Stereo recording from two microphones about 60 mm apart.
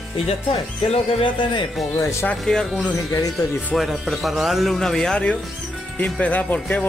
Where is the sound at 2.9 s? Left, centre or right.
Left.